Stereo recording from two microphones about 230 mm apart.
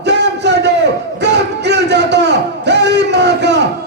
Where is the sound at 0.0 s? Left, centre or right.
Right.